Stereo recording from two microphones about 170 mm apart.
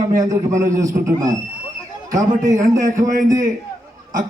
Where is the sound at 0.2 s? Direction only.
20° right (ahead or behind).